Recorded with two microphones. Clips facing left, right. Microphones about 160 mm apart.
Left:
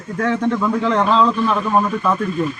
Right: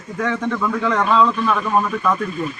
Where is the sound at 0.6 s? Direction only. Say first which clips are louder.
Left 2 dB; 25° left (ahead or behind).